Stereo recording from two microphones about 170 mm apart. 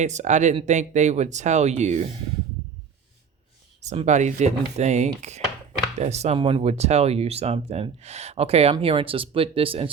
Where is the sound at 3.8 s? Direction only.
40° right (ahead or behind).